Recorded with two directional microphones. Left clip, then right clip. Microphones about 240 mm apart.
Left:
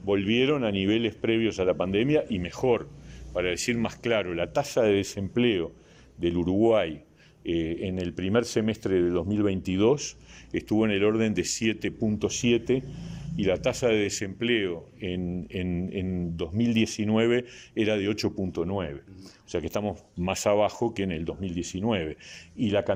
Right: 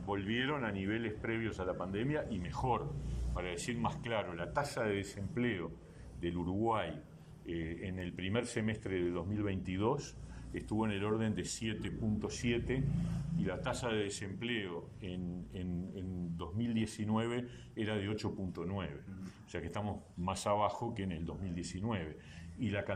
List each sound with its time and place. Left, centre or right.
0.1 s speech: left